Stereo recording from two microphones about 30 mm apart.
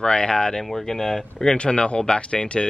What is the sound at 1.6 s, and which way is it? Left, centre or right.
Speech, left.